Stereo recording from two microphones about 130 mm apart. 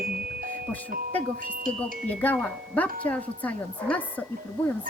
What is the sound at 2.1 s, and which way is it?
Speech, 10° left (ahead or behind).